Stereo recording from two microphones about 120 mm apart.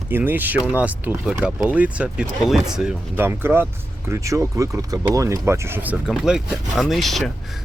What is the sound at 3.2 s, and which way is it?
Speech, 20° right (ahead or behind).